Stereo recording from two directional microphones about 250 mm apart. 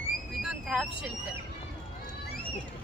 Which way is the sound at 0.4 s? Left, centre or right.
Centre.